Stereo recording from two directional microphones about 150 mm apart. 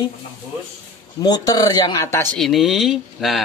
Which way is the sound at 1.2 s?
25° left (ahead or behind).